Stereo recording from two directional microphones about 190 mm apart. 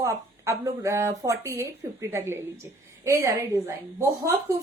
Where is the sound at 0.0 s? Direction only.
15° right (ahead or behind).